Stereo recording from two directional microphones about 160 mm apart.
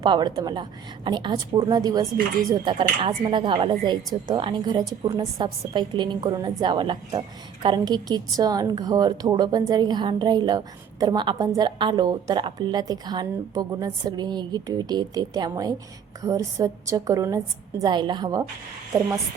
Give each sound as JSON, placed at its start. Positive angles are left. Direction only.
{"t": 0.0, "sound": "a woman's voice", "side_deg": -25}